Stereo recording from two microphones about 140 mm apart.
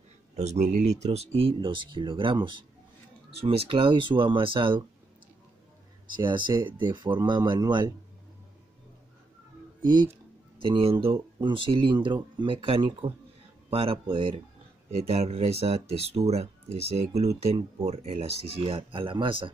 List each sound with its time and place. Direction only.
0.4 s speech: 55° right (ahead or behind); by 4.8 s 40° right (ahead or behind)
6.2 s speech: 35° right (ahead or behind)
10.6 s speech: 40° right (ahead or behind)